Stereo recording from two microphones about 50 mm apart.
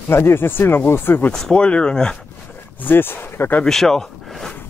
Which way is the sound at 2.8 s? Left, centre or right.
Left.